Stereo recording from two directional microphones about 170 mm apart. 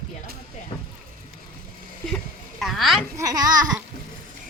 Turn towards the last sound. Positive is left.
turn(degrees=-20)  # may be behind; listen again after turning